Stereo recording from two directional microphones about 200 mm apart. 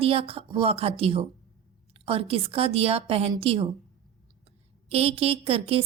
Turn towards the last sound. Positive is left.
turn(degrees=-30)  # may be behind; listen again after turning